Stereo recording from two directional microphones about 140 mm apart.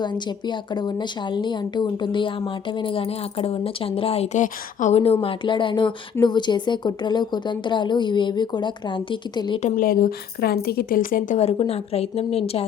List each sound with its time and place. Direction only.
0.0 s a woman's voice: 30° left (ahead or behind); by 5.1 s 55° left (ahead or behind)
5.2 s a woman's voice: 35° left (ahead or behind)
9.7 s a woman's voice: 90° left
11.3 s a woman's voice: 45° left (ahead or behind)